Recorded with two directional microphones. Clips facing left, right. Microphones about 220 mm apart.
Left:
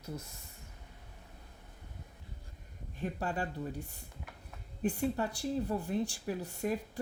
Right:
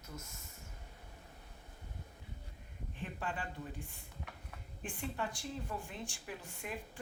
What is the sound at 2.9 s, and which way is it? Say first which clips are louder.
Speech: left 6 dB; 40° left (ahead or behind).